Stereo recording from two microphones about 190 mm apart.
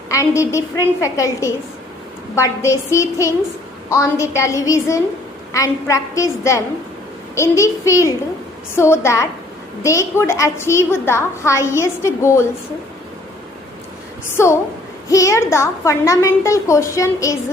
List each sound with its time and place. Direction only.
0.1 s a woman's voice: 15° left (ahead or behind)
14.4 s a woman's voice: 15° left (ahead or behind)